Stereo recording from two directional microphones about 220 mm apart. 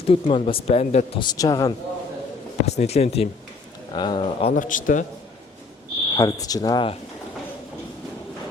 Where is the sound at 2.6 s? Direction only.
30° left (ahead or behind).